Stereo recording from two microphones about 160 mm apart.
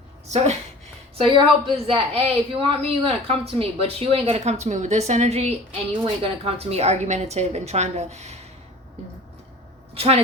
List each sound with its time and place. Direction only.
0.3 s speech: 45° right (ahead or behind)
1.2 s a woman's voice: 30° right (ahead or behind)
9.9 s a woman's voice: 35° right (ahead or behind)